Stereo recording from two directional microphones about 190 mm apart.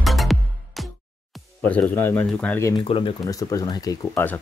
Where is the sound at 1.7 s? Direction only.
10° left (ahead or behind).